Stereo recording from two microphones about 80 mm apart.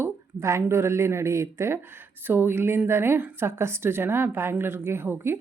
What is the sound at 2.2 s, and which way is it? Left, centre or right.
A woman's voice, right.